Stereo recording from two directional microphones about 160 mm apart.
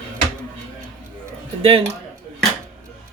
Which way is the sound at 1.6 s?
35° right (ahead or behind).